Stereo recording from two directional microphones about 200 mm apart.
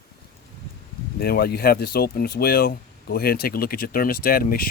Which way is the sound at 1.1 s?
50° left (ahead or behind).